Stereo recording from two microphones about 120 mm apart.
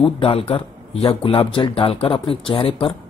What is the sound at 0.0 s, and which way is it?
Speech, 50° left (ahead or behind).